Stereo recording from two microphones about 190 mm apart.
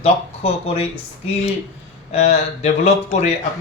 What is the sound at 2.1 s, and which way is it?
Speech, 35° left (ahead or behind).